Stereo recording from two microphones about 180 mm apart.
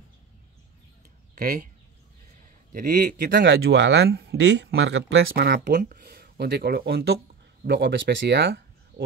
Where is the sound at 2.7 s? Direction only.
50° right (ahead or behind).